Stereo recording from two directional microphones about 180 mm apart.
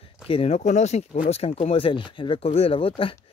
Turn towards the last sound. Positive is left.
turn(degrees=30)  # may be behind; listen again after turning